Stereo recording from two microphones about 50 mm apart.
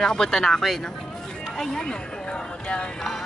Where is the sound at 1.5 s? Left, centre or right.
Centre.